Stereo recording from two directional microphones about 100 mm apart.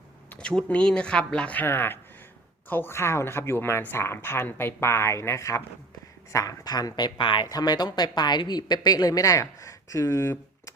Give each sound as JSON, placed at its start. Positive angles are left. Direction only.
{"t": 0.3, "sound": "a woman's voice", "side_deg": 10}